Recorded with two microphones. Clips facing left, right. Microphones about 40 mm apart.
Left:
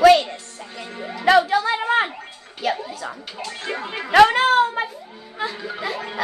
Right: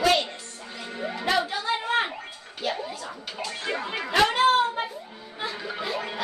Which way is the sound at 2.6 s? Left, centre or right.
Left.